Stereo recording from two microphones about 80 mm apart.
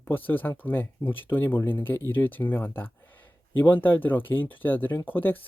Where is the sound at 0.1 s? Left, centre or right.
Left.